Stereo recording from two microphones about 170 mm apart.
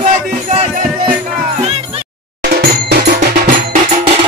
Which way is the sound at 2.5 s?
70° right (ahead or behind).